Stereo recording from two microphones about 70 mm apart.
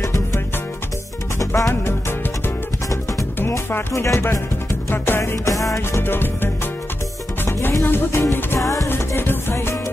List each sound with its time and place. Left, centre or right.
0.0 s music: left
1.4 s music: left
1.7 s music: left
2.9 s music: left
3.3 s speech: left
4.8 s music: left
5.8 s music: left
7.8 s music: left
8.5 s music: left
8.8 s music: left